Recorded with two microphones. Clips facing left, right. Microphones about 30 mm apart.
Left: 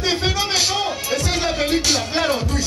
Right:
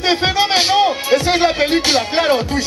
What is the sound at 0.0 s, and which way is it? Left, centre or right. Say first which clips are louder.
A man's voice: right 5 dB; right.